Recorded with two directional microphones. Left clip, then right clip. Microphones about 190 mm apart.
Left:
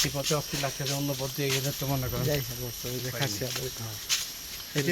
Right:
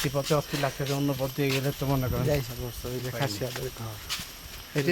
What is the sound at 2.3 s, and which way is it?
Speech, centre (ahead or behind).